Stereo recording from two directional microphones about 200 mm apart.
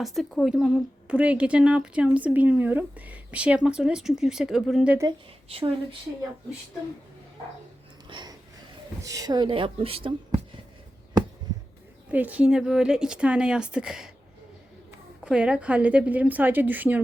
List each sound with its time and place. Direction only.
0.0 s speech: centre (ahead or behind)
5.5 s speech: 30° right (ahead or behind)
8.1 s a sound: 20° right (ahead or behind)
9.0 s speech: 15° right (ahead or behind)
12.1 s speech: 5° right (ahead or behind)
15.2 s a woman's voice: 5° right (ahead or behind)